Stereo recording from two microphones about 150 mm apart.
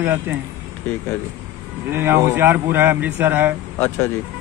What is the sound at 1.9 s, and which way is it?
Speech, 15° right (ahead or behind).